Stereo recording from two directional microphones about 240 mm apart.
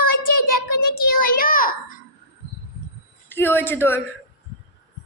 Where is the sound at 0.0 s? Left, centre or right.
Left.